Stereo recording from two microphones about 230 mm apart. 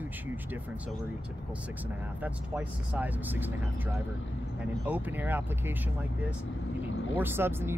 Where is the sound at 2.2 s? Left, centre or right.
Centre.